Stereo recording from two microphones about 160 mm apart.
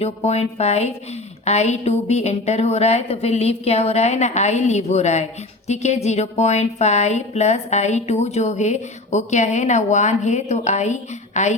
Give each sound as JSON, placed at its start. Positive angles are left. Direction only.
{"t": 0.0, "sound": "a woman's voice", "side_deg": 40}